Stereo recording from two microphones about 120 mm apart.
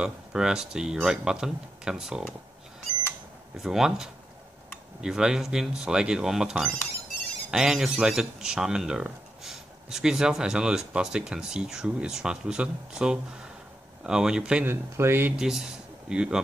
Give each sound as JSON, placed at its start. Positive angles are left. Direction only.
{"t": 0.0, "sound": "speech", "side_deg": -5}
{"t": 3.5, "sound": "speech", "side_deg": -5}
{"t": 14.7, "sound": "speech", "side_deg": -20}
{"t": 15.3, "sound": "speech", "side_deg": -5}